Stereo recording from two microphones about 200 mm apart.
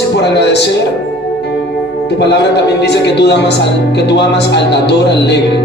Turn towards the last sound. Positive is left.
turn(degrees=60)  # may be behind; listen again after turning